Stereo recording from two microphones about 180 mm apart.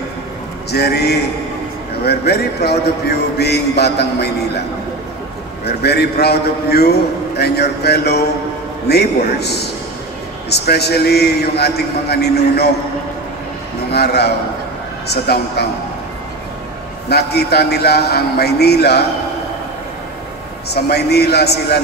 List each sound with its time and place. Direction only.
0.7 s a man's voice: 65° left (ahead or behind)
5.7 s a man's voice: 65° left (ahead or behind)
13.9 s a man's voice: 65° left (ahead or behind)
17.1 s a man's voice: 65° left (ahead or behind)
20.7 s a man's voice: 65° left (ahead or behind)